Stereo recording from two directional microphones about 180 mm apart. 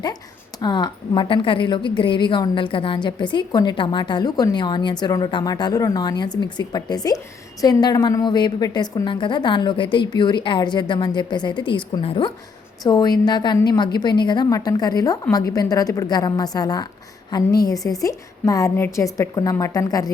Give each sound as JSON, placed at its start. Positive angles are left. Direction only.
{"t": 0.6, "sound": "a woman's voice", "side_deg": 25}